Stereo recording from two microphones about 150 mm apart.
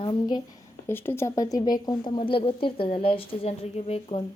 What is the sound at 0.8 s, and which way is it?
Speech, 15° left (ahead or behind).